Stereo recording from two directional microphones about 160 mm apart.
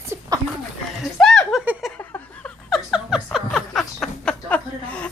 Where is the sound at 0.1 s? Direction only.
15° right (ahead or behind).